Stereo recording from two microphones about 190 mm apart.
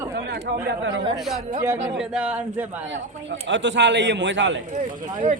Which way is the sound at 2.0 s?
5° right (ahead or behind).